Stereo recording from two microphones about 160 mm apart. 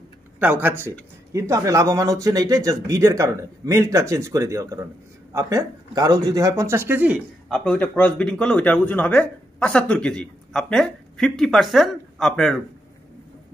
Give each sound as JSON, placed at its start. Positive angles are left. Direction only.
{"t": 0.4, "sound": "speech", "side_deg": -10}
{"t": 7.4, "sound": "speech", "side_deg": 5}